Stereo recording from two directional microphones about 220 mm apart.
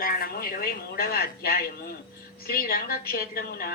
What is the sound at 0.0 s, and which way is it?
A woman's voice, 40° left (ahead or behind).